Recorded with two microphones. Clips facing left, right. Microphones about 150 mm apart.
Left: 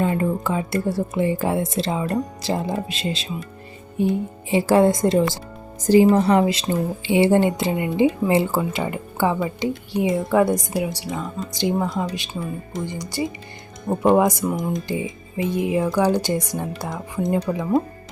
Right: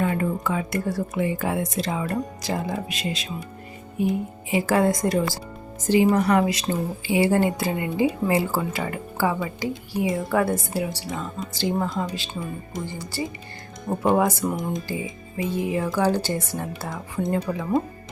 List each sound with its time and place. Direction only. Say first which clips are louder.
0.0 s a woman's voice: left 3 dB; 30° left (ahead or behind)
12.3 s speech: left 3 dB; 5° left (ahead or behind)
12.8 s speech: left 5 dB; 15° left (ahead or behind)
14.4 s speech: left 2 dB; 5° right (ahead or behind)
14.8 s speech: left 4 dB; 20° left (ahead or behind)